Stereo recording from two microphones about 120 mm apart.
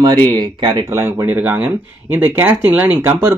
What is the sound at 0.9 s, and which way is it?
Speech, 20° right (ahead or behind).